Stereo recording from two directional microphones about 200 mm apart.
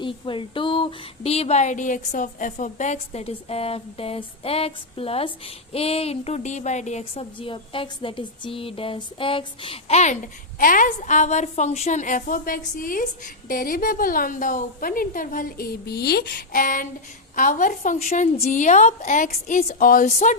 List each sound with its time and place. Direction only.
0.0 s a woman's voice: 25° left (ahead or behind)